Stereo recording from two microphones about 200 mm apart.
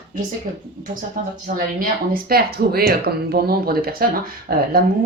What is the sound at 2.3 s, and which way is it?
Speech, 50° right (ahead or behind).